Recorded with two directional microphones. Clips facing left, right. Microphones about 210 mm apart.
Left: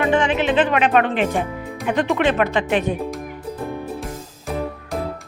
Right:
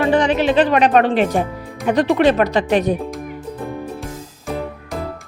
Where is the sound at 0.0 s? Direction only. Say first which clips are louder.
Right 3 dB; 40° right (ahead or behind).